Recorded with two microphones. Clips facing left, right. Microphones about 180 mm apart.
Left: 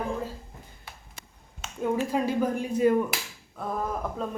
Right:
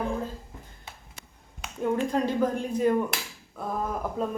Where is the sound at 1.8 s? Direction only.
5° left (ahead or behind).